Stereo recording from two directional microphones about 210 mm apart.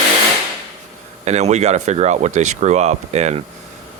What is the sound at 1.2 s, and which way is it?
Speech, 30° right (ahead or behind).